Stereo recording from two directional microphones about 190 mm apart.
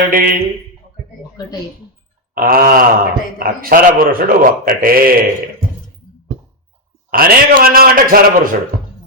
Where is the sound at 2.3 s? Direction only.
50° right (ahead or behind).